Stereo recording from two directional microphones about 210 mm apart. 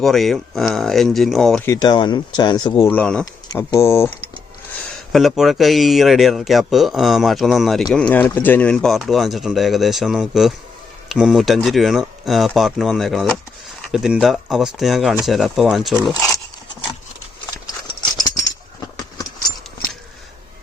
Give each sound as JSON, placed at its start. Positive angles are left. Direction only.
{"t": 0.0, "sound": "speech", "side_deg": 0}
{"t": 1.6, "sound": "speech", "side_deg": 15}
{"t": 5.1, "sound": "speech", "side_deg": 0}
{"t": 17.8, "sound": "rattle", "side_deg": 20}